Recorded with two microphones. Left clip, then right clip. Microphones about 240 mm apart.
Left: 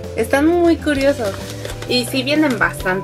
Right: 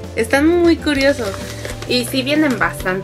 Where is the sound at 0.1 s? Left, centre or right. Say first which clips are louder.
Right 1 dB; centre.